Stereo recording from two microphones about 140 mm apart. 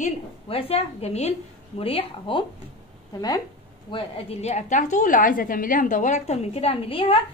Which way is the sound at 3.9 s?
40° left (ahead or behind).